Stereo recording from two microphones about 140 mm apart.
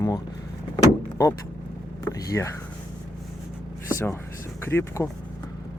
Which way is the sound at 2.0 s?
25° left (ahead or behind).